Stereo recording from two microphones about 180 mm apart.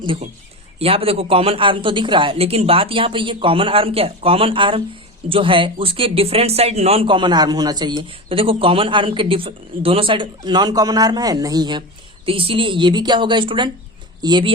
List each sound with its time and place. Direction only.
0.0 s a woman's voice: 30° right (ahead or behind)